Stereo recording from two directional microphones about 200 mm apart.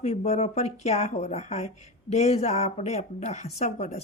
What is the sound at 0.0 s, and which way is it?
Speech, 35° left (ahead or behind).